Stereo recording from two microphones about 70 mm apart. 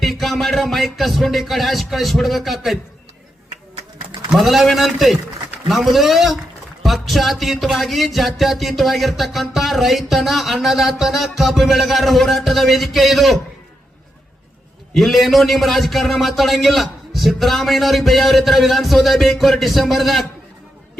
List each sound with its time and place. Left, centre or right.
0.0 s speech: centre
4.3 s speech: centre
14.9 s speech: centre